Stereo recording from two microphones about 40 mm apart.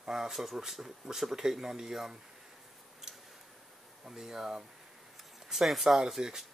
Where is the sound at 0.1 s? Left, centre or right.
Centre.